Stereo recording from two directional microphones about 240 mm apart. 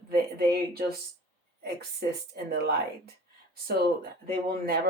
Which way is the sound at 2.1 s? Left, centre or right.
Right.